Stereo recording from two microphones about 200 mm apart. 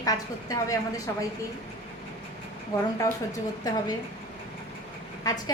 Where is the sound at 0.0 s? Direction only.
15° left (ahead or behind).